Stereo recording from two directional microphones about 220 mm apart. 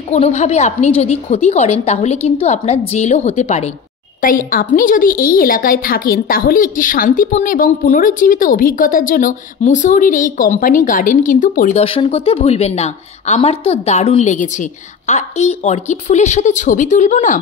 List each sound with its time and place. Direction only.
0.1 s a woman's voice: 30° left (ahead or behind)